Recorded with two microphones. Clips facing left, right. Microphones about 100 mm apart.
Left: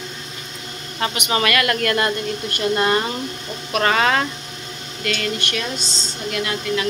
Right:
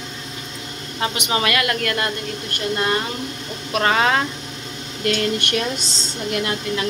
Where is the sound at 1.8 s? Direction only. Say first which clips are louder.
Left 3 dB; centre (ahead or behind).